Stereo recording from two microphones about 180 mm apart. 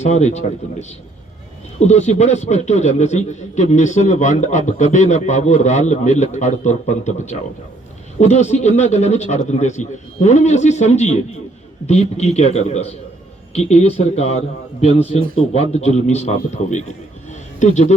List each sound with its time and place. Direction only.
0.0 s a man's voice: 40° left (ahead or behind)